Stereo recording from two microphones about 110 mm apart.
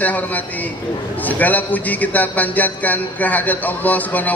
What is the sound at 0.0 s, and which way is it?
A man's voice, 15° left (ahead or behind).